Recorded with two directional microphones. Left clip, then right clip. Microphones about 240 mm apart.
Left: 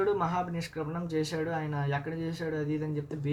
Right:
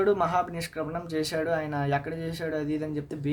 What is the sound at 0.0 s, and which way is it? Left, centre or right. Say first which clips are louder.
Speech: right 5 dB; right.